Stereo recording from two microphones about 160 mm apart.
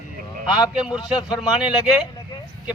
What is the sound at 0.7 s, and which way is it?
Speech, 5° right (ahead or behind).